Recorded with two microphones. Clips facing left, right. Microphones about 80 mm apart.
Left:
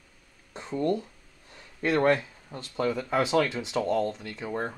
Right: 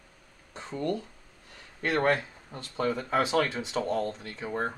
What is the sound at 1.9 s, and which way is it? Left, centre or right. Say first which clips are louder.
Speech: left 3 dB; right.